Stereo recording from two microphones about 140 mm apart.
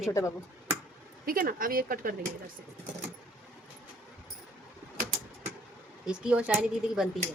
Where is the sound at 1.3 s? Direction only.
90° right.